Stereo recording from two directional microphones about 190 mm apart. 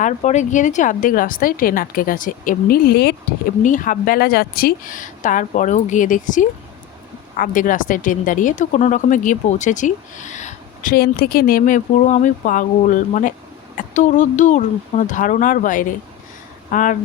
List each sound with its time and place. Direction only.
0.0 s speech: 40° left (ahead or behind); by 3.2 s 55° left (ahead or behind)
3.6 s speech: 45° left (ahead or behind)
10.9 s speech: 55° left (ahead or behind)